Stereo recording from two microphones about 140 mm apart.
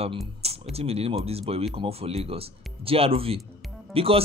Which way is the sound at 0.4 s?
45° right (ahead or behind).